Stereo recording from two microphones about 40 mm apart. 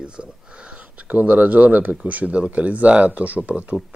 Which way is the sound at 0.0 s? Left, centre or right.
Right.